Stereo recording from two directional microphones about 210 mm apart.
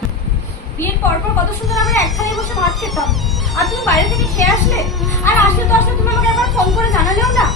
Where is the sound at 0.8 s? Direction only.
10° left (ahead or behind).